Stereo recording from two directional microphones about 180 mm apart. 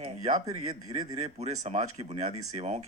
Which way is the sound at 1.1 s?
40° right (ahead or behind).